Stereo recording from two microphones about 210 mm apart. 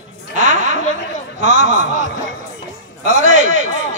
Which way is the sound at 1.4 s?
35° right (ahead or behind).